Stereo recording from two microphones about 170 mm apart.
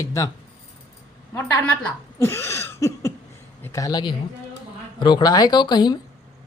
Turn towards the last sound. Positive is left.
turn(degrees=25)  # may be behind; listen again after turning